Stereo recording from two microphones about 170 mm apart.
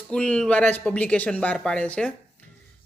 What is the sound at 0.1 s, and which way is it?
Speech, 5° left (ahead or behind).